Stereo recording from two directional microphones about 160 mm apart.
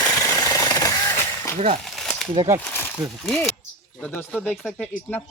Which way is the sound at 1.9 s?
Centre (ahead or behind).